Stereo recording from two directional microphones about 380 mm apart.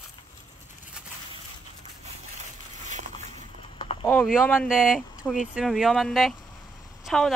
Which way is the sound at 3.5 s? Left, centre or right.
Centre.